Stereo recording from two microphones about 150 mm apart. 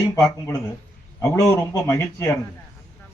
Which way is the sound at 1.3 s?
15° left (ahead or behind).